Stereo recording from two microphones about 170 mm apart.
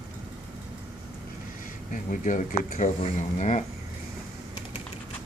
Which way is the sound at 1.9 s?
50° left (ahead or behind).